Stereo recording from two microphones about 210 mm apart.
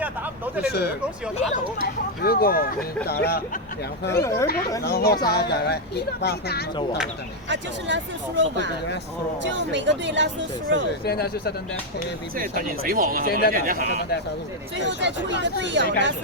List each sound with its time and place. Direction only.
0.7 s speech: 50° left (ahead or behind)
2.2 s speech: 45° left (ahead or behind)
4.1 s speech: 15° left (ahead or behind)
4.8 s speech: 50° left (ahead or behind)
7.5 s speech: 60° right (ahead or behind)
11.0 s speech: 50° left (ahead or behind)
12.4 s speech: 45° right (ahead or behind)
13.2 s speech: 45° left (ahead or behind)
13.5 s speech: 45° right (ahead or behind)
13.8 s speech: 55° left (ahead or behind)
14.8 s speech: 60° right (ahead or behind)